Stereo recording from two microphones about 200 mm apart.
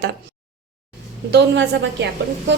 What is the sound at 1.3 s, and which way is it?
A woman's voice, 60° right (ahead or behind).